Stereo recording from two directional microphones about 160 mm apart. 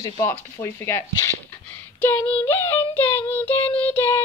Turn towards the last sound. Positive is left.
turn(degrees=10)  # may be behind; listen again after turning